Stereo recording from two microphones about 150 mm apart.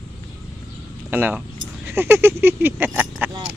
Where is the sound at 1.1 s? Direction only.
10° right (ahead or behind).